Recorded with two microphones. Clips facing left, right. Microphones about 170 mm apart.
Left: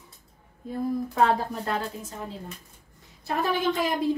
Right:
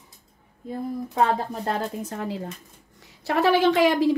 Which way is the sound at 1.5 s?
35° right (ahead or behind).